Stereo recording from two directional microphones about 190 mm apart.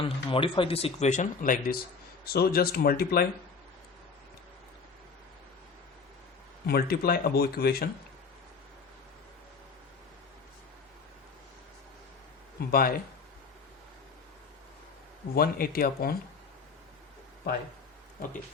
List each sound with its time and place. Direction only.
0.0 s speech: 25° left (ahead or behind); by 3.2 s 55° left (ahead or behind)
6.7 s speech: 55° left (ahead or behind)
12.5 s speech: 50° left (ahead or behind)
15.4 s speech: 50° left (ahead or behind)